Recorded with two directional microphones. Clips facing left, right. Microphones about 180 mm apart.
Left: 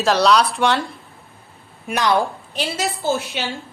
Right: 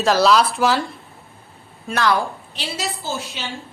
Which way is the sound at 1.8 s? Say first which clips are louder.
Left 1 dB; 15° left (ahead or behind).